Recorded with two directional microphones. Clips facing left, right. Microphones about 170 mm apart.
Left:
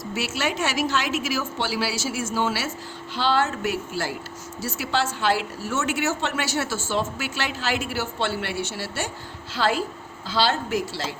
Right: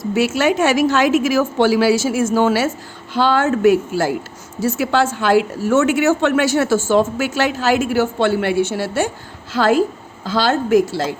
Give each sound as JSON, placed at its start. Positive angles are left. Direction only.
{"t": 0.0, "sound": "a woman's voice", "side_deg": -50}